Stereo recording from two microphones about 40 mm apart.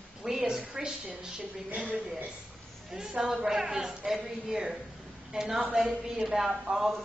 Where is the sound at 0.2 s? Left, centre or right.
Centre.